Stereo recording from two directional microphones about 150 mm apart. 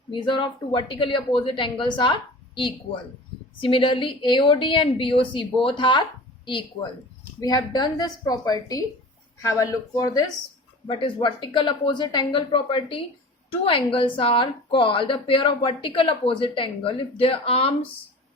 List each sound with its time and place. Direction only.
0.1 s a woman's voice: 35° left (ahead or behind)
3.6 s a woman's voice: 35° left (ahead or behind)